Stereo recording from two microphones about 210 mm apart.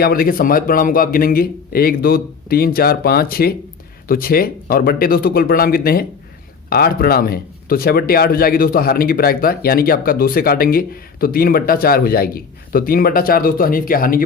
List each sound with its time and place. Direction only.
0.0 s speech: 45° left (ahead or behind)